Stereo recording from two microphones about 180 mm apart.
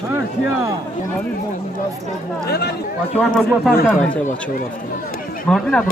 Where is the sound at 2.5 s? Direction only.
65° left (ahead or behind).